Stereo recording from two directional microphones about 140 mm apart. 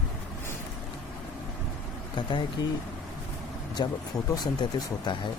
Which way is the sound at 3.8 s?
30° left (ahead or behind).